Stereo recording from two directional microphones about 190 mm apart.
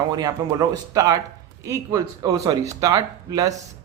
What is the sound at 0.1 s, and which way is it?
Speech, 20° right (ahead or behind).